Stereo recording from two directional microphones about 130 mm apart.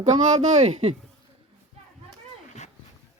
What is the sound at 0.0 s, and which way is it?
Speech, 60° right (ahead or behind).